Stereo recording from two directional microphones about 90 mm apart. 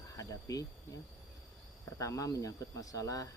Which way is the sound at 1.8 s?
35° left (ahead or behind).